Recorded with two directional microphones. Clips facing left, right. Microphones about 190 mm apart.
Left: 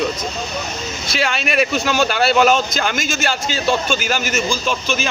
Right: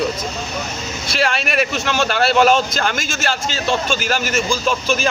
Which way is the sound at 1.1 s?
Centre (ahead or behind).